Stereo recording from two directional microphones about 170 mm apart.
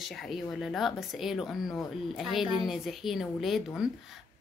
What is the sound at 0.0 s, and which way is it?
Speech, centre (ahead or behind).